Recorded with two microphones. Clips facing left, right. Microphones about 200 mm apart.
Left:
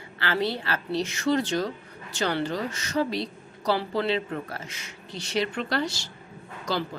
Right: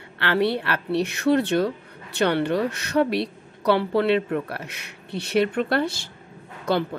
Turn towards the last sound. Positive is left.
turn(degrees=-60)  # may be behind; listen again after turning